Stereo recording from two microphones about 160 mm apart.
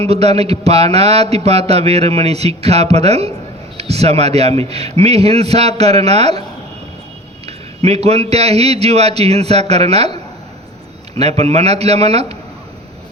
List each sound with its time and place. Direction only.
0.0 s speech: 40° right (ahead or behind)
7.4 s speech: 40° right (ahead or behind)
11.2 s speech: 40° right (ahead or behind)